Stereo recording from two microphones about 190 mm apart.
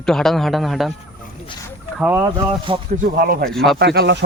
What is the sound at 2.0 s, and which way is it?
Speech, 10° right (ahead or behind).